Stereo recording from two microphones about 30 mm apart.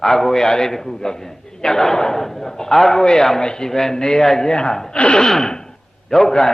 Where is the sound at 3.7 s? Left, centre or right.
Centre.